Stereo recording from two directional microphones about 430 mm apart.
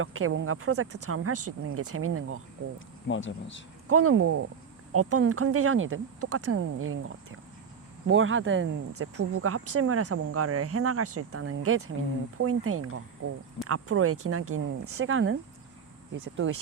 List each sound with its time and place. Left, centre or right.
0.0 s speech: right
2.7 s speech: left
3.8 s speech: right
16.4 s speech: right